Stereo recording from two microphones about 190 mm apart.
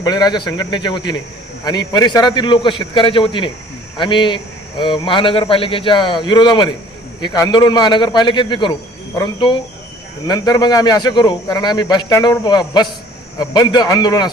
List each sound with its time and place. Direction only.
0.0 s speech: 20° left (ahead or behind)